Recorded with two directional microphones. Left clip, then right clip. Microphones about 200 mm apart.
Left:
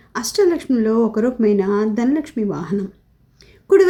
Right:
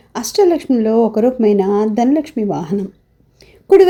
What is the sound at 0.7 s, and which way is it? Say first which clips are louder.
Speech: right 4 dB; 20° right (ahead or behind).